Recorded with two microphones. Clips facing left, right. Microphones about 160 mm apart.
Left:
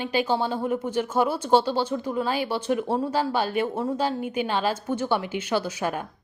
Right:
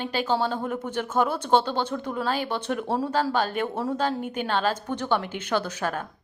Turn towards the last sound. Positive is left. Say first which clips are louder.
# left 1 dB
turn(degrees=10)  # may be behind; listen again after turning